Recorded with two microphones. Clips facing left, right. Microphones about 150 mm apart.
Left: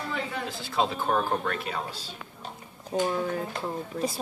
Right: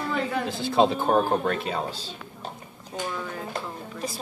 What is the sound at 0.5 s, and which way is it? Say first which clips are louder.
Speech: right 7 dB; 25° right (ahead or behind).